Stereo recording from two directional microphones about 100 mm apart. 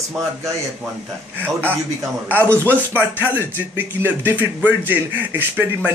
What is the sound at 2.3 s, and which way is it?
A man's voice, 25° right (ahead or behind).